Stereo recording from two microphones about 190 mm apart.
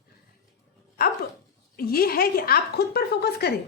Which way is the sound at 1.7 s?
55° left (ahead or behind).